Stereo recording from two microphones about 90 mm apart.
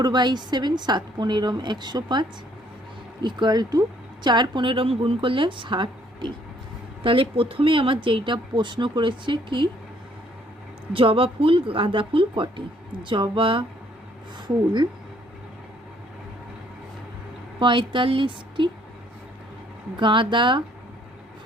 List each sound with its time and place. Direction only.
0.0 s a woman's voice: 55° right (ahead or behind)
3.2 s speech: 55° right (ahead or behind)
7.0 s speech: 85° right; by 9.6 s 65° right (ahead or behind)
10.9 s speech: 80° right
14.4 s speech: 55° right (ahead or behind)
17.6 s speech: 65° right (ahead or behind)
20.0 s speech: 65° right (ahead or behind)